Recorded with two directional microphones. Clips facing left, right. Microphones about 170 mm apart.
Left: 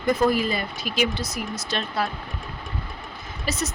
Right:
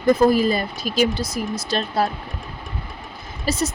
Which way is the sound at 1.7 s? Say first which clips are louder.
Right 5 dB; 40° right (ahead or behind).